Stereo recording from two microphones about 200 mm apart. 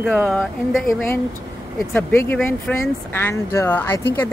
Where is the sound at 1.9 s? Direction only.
10° left (ahead or behind).